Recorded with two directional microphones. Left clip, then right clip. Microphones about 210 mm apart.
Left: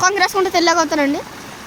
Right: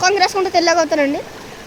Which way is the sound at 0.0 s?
15° left (ahead or behind).